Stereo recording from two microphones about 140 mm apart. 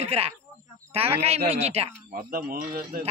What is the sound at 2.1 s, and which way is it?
Speech, 90° right.